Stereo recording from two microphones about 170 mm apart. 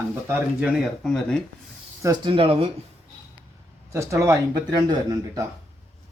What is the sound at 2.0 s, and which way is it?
Speech, 25° right (ahead or behind).